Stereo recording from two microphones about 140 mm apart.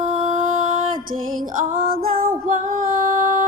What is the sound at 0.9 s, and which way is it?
Music, 75° right (ahead or behind).